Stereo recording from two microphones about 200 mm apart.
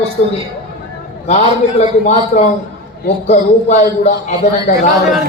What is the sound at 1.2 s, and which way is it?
Speech, 30° left (ahead or behind).